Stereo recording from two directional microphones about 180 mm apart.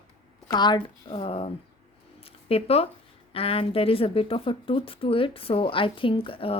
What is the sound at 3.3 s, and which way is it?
A woman's voice, 30° left (ahead or behind).